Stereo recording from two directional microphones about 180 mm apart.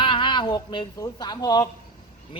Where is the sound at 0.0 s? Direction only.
25° left (ahead or behind).